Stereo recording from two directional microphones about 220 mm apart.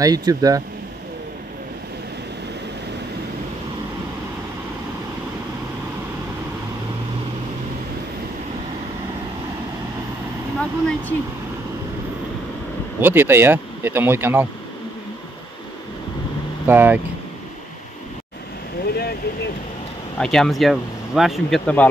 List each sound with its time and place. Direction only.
0.0 s speech: 15° right (ahead or behind)
10.6 s a sound: 5° left (ahead or behind)
13.0 s speech: 10° right (ahead or behind)
16.6 s speech: 10° right (ahead or behind)
20.2 s speech: centre (ahead or behind)